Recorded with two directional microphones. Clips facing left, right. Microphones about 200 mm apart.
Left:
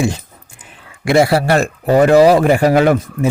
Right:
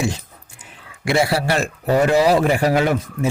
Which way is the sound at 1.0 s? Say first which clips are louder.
Left 6 dB; 50° left (ahead or behind).